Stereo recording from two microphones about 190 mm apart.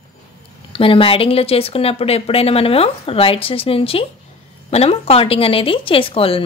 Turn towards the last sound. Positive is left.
turn(degrees=30)  # may be behind; listen again after turning